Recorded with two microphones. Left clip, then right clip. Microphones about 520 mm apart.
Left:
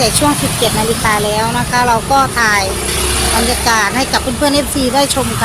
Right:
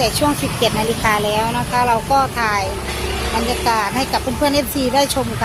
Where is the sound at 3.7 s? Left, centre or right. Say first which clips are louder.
Left 4 dB; right.